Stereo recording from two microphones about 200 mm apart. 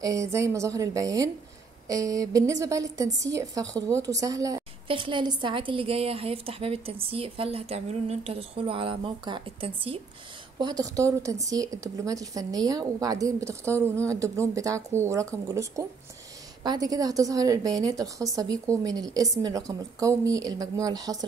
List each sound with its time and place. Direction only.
0.0 s a woman's voice: 15° right (ahead or behind)